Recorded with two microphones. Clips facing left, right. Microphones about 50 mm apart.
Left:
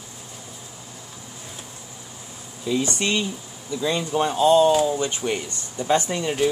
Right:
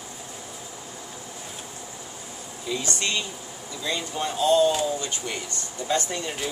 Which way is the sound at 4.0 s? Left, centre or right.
Left.